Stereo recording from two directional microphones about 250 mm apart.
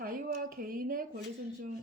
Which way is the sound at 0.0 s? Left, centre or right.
Right.